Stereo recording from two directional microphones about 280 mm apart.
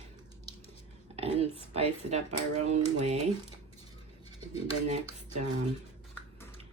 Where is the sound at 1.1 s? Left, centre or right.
Right.